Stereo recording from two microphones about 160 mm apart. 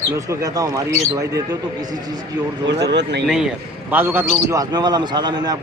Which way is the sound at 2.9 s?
90° right.